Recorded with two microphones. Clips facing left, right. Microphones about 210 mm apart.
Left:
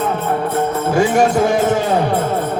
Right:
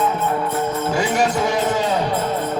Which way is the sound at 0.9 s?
50° left (ahead or behind).